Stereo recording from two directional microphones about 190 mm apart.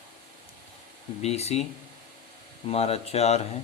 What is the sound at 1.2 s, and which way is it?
Speech, 35° left (ahead or behind).